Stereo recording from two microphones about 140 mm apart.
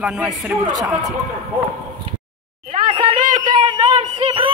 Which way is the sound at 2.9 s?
35° right (ahead or behind).